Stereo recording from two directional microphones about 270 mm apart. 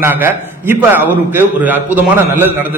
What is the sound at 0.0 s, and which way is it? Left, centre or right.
A man's voice, centre.